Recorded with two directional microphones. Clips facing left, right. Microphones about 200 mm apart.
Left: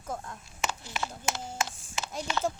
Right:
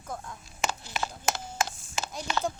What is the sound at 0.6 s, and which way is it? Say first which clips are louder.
Speech: right 2 dB; 40° right (ahead or behind).